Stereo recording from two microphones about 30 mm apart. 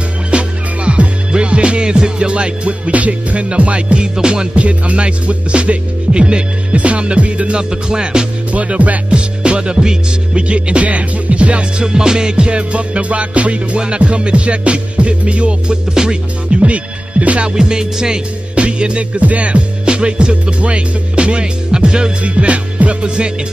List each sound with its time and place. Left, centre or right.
0.3 s music: right
4.6 s music: right
7.9 s music: right
8.5 s music: right
9.4 s music: right
11.8 s music: right
15.7 s music: right
16.5 s music: right
17.6 s music: right
18.5 s music: right
22.2 s music: right